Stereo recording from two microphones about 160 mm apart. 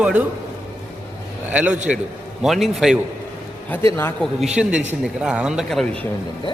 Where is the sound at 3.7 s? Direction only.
15° left (ahead or behind).